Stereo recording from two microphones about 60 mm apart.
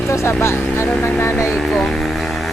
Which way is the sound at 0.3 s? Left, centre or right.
Left.